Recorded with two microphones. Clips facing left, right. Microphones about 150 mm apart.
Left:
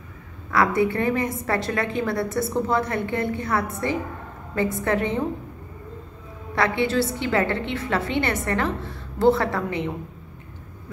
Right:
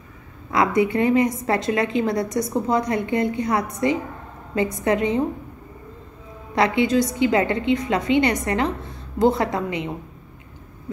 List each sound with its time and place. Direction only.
0.5 s a woman's voice: 20° right (ahead or behind)
6.5 s a woman's voice: 20° right (ahead or behind)